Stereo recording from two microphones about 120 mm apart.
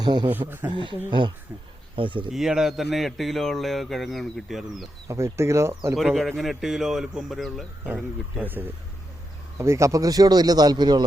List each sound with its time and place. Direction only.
0.0 s speech: 35° right (ahead or behind)
0.3 s speech: 15° right (ahead or behind)
0.7 s speech: 40° right (ahead or behind)
2.3 s speech: 5° right (ahead or behind)
5.0 s speech: 25° right (ahead or behind)
6.0 s speech: centre (ahead or behind)
8.4 s speech: 15° right (ahead or behind); by 11.0 s 35° right (ahead or behind)